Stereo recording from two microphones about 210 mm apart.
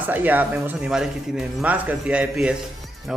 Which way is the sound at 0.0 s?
10° right (ahead or behind).